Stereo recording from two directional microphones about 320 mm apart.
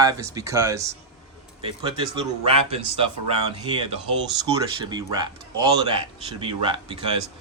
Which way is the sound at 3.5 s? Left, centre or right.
Centre.